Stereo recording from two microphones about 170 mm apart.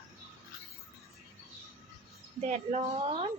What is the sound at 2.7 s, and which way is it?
Speech, 35° right (ahead or behind).